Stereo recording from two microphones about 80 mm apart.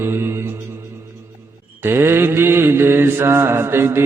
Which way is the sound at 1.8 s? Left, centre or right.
Right.